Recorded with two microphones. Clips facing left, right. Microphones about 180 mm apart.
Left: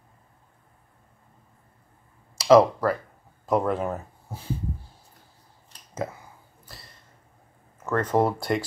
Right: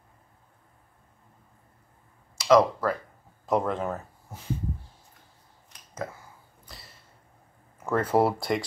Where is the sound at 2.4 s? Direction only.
30° left (ahead or behind).